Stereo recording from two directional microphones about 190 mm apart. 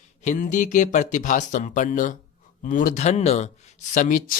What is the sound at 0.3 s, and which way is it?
Speech, 40° left (ahead or behind).